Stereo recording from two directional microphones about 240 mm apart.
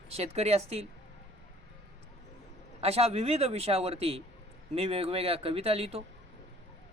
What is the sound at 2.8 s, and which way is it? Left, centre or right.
Speech, right.